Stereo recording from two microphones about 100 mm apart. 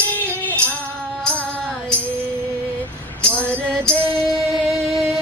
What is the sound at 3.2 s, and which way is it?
Music, 10° left (ahead or behind).